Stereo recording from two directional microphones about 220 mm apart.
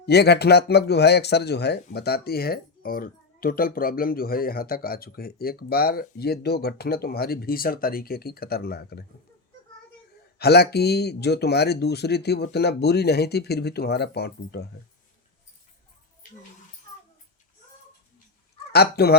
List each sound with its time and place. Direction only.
0.0 s speech: 50° left (ahead or behind)
10.3 s speech: 45° left (ahead or behind)
18.7 s speech: 45° left (ahead or behind)